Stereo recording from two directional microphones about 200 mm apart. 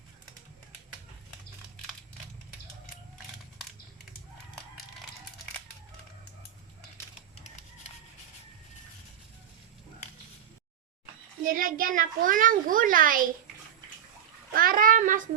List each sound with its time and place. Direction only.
11.4 s a child's voice: 45° right (ahead or behind)
14.5 s bathtub: 45° right (ahead or behind)